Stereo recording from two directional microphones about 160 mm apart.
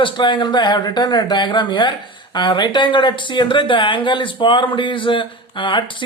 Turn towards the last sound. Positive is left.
turn(degrees=30)  # may be behind; listen again after turning